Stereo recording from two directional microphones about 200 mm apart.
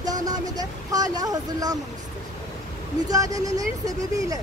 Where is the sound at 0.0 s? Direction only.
20° right (ahead or behind).